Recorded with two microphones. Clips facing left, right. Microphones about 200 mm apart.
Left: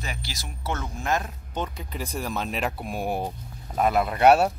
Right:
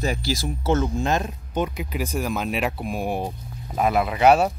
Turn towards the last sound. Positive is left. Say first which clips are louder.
# right 1 dB
turn(degrees=0)  # may be behind; listen again after turning